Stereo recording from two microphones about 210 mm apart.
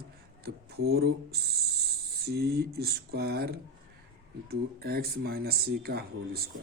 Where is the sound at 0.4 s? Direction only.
50° right (ahead or behind).